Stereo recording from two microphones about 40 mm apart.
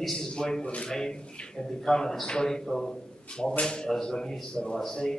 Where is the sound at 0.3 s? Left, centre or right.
Centre.